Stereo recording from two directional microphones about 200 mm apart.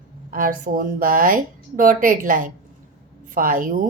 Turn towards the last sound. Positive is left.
turn(degrees=-40)  # may be behind; listen again after turning